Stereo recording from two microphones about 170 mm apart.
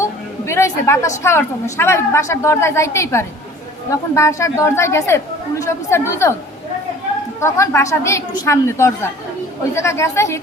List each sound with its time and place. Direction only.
0.0 s a sound: 15° left (ahead or behind)
1.2 s a woman's voice: 15° left (ahead or behind)
7.3 s a woman's voice: 15° left (ahead or behind)